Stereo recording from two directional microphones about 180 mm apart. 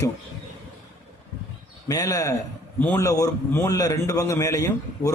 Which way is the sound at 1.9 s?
20° left (ahead or behind).